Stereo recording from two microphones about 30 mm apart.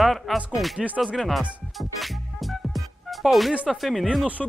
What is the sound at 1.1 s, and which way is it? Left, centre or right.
Music, centre.